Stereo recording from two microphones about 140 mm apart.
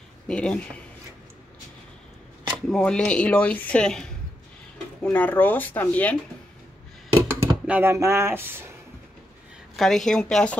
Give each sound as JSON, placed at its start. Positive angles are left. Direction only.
{"t": 0.3, "sound": "speech", "side_deg": 5}
{"t": 2.7, "sound": "speech", "side_deg": 5}
{"t": 7.2, "sound": "speech", "side_deg": -15}
{"t": 9.8, "sound": "a woman's voice", "side_deg": 5}